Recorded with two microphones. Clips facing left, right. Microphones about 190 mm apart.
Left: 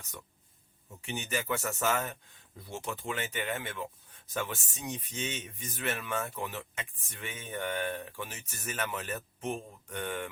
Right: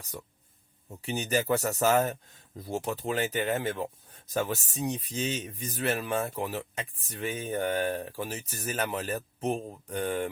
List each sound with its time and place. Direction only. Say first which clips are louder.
0.9 s speech: right 6 dB; 35° right (ahead or behind)